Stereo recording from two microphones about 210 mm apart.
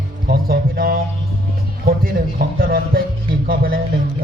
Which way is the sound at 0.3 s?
45° right (ahead or behind).